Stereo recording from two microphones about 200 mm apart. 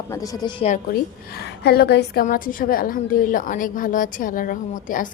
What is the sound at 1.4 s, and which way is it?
A woman's voice, 55° left (ahead or behind).